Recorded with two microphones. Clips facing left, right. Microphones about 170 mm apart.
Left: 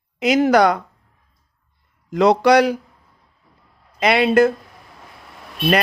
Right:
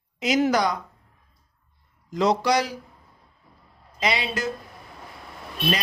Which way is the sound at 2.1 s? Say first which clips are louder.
Left 8 dB; 65° left (ahead or behind).